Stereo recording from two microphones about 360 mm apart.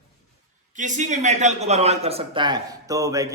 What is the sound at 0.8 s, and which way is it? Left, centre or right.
A man's voice, right.